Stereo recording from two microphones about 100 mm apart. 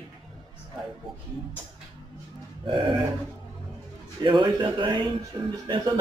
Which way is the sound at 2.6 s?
55° right (ahead or behind).